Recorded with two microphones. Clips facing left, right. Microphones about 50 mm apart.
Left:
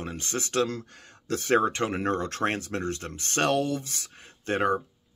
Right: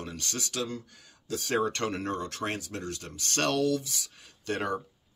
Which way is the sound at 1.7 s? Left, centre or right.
Left.